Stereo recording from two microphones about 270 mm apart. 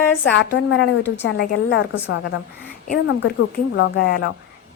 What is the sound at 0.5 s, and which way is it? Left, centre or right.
A woman's voice, left.